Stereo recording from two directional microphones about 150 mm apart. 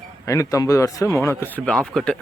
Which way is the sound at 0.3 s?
20° left (ahead or behind).